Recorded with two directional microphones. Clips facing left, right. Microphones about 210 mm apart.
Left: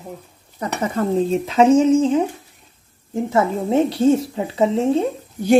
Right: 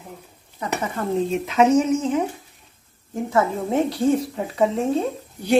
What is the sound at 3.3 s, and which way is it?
A woman's voice, 25° left (ahead or behind).